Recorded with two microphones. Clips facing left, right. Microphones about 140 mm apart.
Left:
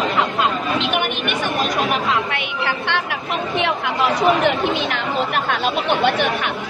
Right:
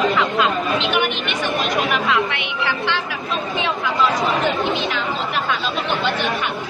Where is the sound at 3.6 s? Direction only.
65° left (ahead or behind).